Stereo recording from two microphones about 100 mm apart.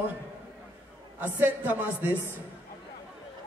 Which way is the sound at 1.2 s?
20° right (ahead or behind).